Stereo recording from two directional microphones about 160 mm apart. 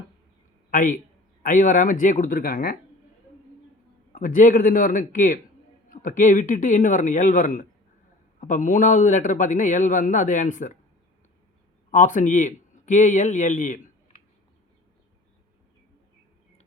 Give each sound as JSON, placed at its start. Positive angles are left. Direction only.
{"t": 0.7, "sound": "a man's voice", "side_deg": 55}
{"t": 4.1, "sound": "a man's voice", "side_deg": 60}
{"t": 11.9, "sound": "a man's voice", "side_deg": 55}